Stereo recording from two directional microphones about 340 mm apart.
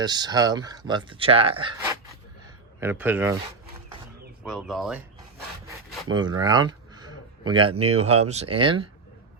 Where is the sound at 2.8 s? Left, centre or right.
Centre.